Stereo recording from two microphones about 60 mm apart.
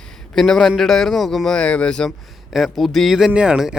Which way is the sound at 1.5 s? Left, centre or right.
Centre.